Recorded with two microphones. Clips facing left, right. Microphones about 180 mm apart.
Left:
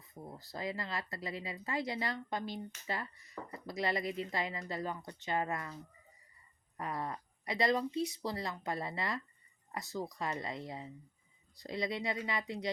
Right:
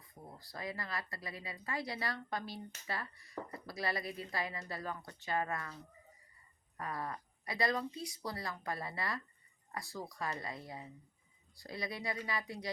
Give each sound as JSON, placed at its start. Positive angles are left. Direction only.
{"t": 0.0, "sound": "speech", "side_deg": 25}
{"t": 6.7, "sound": "speech", "side_deg": 20}